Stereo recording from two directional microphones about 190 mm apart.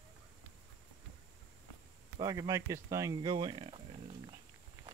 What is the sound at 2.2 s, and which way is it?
Speech, 20° right (ahead or behind).